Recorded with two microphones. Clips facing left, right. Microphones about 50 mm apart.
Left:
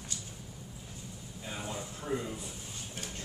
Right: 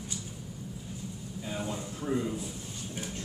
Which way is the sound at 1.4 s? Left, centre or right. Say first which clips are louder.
Right 4 dB; centre.